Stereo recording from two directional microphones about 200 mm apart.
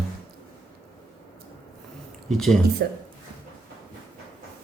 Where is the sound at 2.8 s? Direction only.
50° right (ahead or behind).